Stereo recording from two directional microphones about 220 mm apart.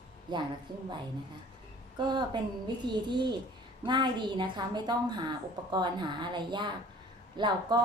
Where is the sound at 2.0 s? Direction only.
20° right (ahead or behind).